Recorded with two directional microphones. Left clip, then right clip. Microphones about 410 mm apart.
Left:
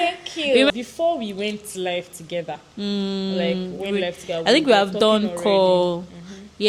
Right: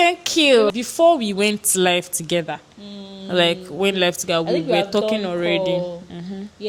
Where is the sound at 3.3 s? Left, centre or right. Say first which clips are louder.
Right 9 dB; right.